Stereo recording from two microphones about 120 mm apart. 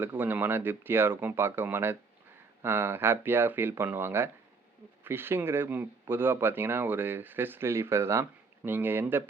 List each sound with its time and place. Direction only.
0.0 s speech: 15° right (ahead or behind)